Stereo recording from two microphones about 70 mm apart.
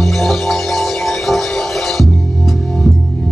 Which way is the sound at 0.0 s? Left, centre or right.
Centre.